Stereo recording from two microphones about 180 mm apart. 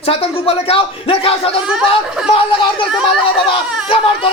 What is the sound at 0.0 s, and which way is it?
Speech, 30° left (ahead or behind).